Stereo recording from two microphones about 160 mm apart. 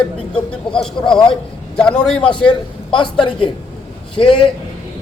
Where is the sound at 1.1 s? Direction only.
30° left (ahead or behind).